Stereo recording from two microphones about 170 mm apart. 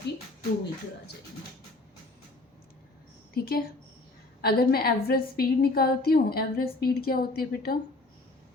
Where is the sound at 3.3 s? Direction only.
60° left (ahead or behind).